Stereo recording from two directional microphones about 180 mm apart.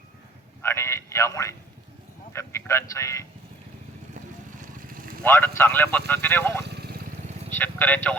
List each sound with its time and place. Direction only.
0.6 s a sound: 15° left (ahead or behind)
2.3 s a man's voice: 15° left (ahead or behind)
4.8 s vehicle: 50° right (ahead or behind)
5.2 s a man's voice: 15° left (ahead or behind)
6.7 s vehicle: 65° right (ahead or behind)
7.5 s a man's voice: 10° left (ahead or behind)